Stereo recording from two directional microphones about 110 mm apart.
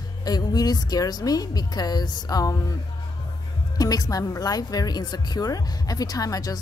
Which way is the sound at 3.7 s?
35° left (ahead or behind).